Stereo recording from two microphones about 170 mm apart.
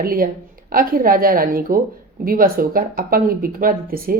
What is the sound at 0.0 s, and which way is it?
A woman's voice, 60° right (ahead or behind).